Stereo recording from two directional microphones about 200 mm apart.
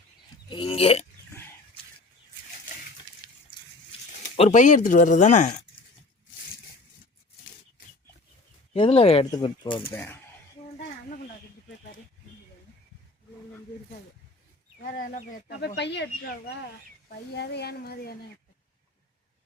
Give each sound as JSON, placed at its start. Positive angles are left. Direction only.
{"t": 0.5, "sound": "speech", "side_deg": 25}
{"t": 4.4, "sound": "speech", "side_deg": 35}
{"t": 8.7, "sound": "speech", "side_deg": 30}
{"t": 9.8, "sound": "speech", "side_deg": 10}
{"t": 14.8, "sound": "speech", "side_deg": 45}
{"t": 15.4, "sound": "speech", "side_deg": 55}
{"t": 17.1, "sound": "a woman's voice", "side_deg": 55}